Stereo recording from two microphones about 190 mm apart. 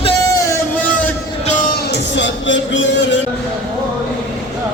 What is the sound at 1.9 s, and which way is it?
Music, 70° left (ahead or behind).